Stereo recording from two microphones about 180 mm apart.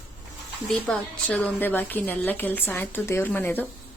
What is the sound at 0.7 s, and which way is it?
A woman's voice, 10° left (ahead or behind).